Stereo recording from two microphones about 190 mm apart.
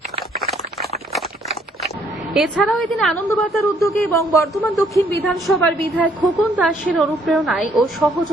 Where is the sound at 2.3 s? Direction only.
Centre (ahead or behind).